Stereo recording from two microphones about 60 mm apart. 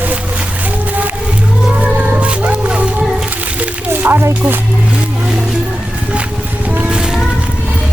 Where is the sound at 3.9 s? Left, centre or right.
Right.